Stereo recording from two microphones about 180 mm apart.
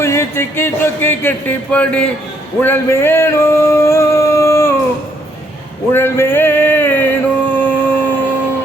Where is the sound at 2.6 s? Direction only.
15° left (ahead or behind).